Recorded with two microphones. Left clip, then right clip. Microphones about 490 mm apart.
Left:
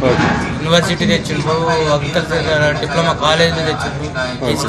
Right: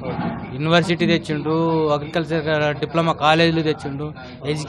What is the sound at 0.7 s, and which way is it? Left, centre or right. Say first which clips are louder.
A man's voice: left 3 dB; right.